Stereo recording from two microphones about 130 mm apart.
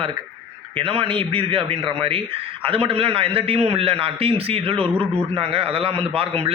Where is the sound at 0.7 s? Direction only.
45° right (ahead or behind).